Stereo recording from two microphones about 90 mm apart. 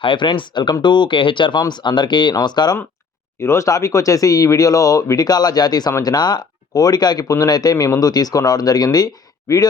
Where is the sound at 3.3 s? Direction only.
30° left (ahead or behind).